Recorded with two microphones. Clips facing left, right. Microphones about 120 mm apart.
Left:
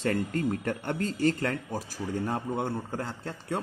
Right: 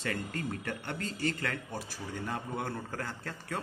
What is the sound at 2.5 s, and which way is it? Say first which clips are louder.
A man's voice: left 6 dB; 25° left (ahead or behind).